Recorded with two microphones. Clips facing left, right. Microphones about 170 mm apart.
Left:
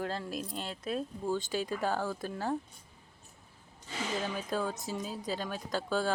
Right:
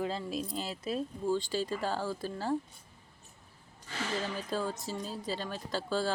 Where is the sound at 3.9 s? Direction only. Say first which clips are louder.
Even; 15° left (ahead or behind).